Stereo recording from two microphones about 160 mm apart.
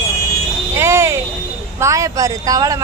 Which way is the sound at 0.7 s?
15° right (ahead or behind).